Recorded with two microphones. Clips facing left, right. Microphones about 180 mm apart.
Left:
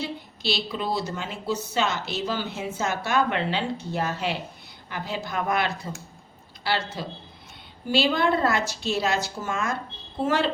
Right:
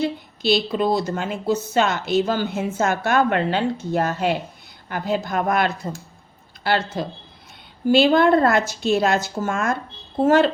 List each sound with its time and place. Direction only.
0.0 s a woman's voice: 50° right (ahead or behind)